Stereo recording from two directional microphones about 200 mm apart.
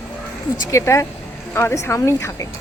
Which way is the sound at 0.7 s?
15° left (ahead or behind).